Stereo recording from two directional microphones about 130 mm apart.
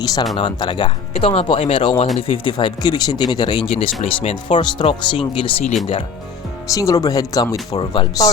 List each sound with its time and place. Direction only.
0.0 s speech: 30° left (ahead or behind); by 5.7 s 45° left (ahead or behind)
6.7 s speech: 25° left (ahead or behind)